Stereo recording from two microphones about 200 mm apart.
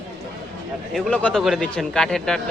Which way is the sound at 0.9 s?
5° left (ahead or behind).